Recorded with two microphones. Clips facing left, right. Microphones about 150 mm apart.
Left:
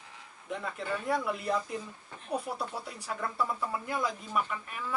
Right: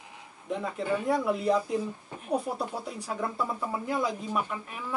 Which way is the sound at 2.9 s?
10° right (ahead or behind).